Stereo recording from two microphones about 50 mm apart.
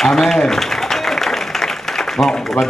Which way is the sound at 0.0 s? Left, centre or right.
Centre.